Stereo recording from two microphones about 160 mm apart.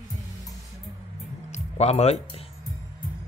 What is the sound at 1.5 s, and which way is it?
Music, 45° left (ahead or behind).